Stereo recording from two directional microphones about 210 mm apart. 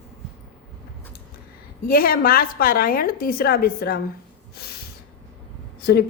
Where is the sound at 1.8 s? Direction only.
45° left (ahead or behind).